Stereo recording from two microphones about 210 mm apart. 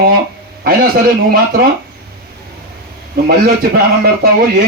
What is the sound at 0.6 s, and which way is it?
Speech, 45° right (ahead or behind).